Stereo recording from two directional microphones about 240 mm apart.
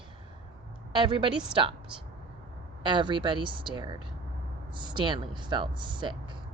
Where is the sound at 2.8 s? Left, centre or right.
Centre.